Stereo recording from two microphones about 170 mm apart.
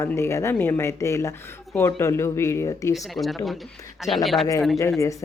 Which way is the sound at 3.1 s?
Centre (ahead or behind).